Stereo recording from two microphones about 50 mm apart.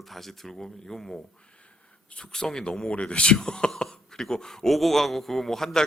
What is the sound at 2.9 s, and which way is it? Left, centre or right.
Speech, left.